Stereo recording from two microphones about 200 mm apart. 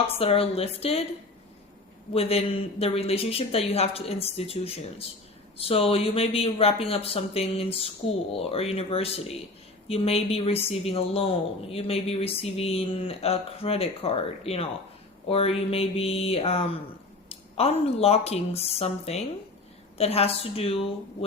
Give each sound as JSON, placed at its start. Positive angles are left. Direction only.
{"t": 0.2, "sound": "a woman's voice", "side_deg": 30}
{"t": 2.1, "sound": "a woman's voice", "side_deg": 30}